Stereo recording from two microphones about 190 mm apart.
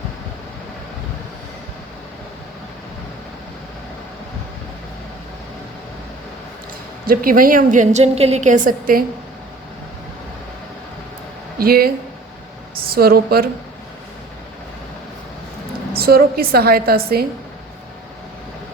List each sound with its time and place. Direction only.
7.1 s a woman's voice: 50° right (ahead or behind)
11.5 s speech: 50° right (ahead or behind)
12.9 s a woman's voice: 55° right (ahead or behind)
15.9 s a woman's voice: 55° right (ahead or behind)